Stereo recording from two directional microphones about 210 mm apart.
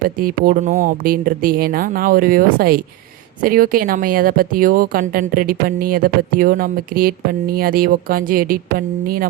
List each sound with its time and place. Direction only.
0.2 s speech: 40° right (ahead or behind)